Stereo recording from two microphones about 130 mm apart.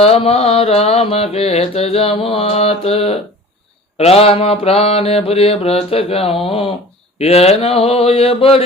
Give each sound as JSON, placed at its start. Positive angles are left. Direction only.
{"t": 0.0, "sound": "mantra", "side_deg": 50}